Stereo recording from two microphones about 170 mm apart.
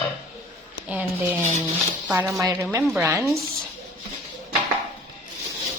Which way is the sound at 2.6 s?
5° right (ahead or behind).